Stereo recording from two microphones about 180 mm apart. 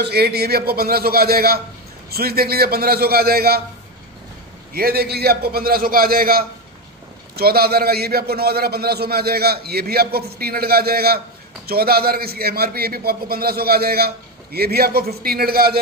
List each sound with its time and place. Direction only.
0.0 s a man's voice: 60° right (ahead or behind)
4.7 s a man's voice: 55° right (ahead or behind)